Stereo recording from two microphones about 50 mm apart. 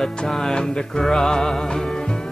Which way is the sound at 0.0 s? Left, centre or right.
Centre.